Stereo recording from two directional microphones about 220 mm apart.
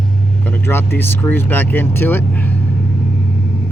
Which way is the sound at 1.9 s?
10° left (ahead or behind).